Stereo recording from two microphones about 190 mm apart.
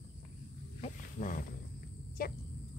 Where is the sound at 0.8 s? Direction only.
45° left (ahead or behind).